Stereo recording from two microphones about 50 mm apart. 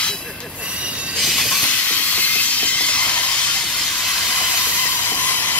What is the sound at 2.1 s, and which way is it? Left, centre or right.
Train, left.